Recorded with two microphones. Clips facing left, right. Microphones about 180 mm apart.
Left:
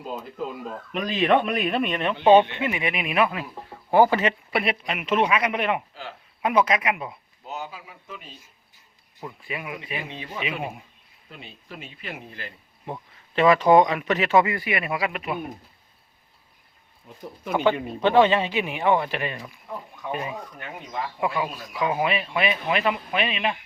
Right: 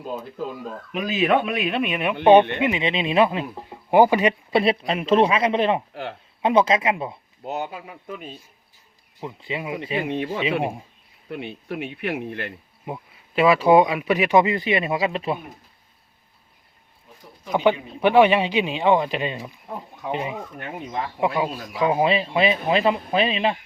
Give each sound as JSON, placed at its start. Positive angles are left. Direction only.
{"t": 0.9, "sound": "speech", "side_deg": -5}
{"t": 2.6, "sound": "speech", "side_deg": -20}
{"t": 4.5, "sound": "speech", "side_deg": -30}
{"t": 5.9, "sound": "speech", "side_deg": -60}
{"t": 6.4, "sound": "speech", "side_deg": -25}
{"t": 7.4, "sound": "speech", "side_deg": -60}
{"t": 9.2, "sound": "speech", "side_deg": -25}
{"t": 10.0, "sound": "speech", "side_deg": -60}
{"t": 11.3, "sound": "speech", "side_deg": -60}
{"t": 12.8, "sound": "speech", "side_deg": -10}
{"t": 17.5, "sound": "speech", "side_deg": -15}